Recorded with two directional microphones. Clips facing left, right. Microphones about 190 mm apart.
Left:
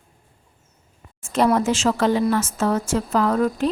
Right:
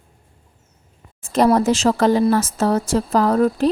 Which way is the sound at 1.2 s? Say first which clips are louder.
Right 3 dB; 35° right (ahead or behind).